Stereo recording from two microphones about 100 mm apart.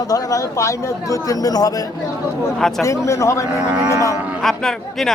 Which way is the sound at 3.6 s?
10° right (ahead or behind).